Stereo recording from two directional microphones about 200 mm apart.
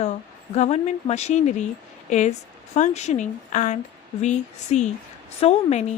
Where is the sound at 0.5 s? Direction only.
35° left (ahead or behind).